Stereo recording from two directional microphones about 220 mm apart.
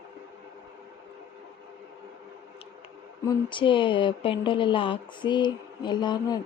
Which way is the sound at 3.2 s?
20° left (ahead or behind).